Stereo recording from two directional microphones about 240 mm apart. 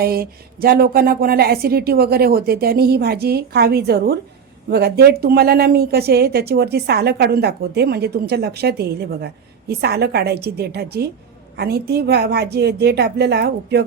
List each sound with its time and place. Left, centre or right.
0.0 s a woman's voice: right